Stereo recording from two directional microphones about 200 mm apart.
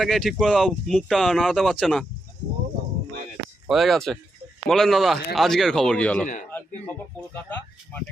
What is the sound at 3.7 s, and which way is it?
Speech, centre (ahead or behind).